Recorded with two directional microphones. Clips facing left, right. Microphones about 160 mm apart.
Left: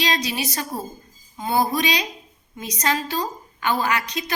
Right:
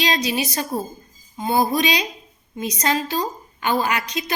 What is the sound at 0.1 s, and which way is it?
A woman's voice, 20° right (ahead or behind).